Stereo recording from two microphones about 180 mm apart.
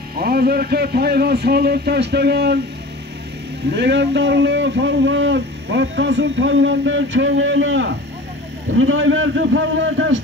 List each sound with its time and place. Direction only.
0.2 s a man's voice: 60° right (ahead or behind)
3.7 s a man's voice: 70° right (ahead or behind); by 10.2 s 90° right